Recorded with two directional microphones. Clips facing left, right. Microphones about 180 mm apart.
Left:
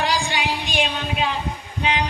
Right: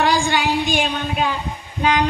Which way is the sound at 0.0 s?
45° right (ahead or behind).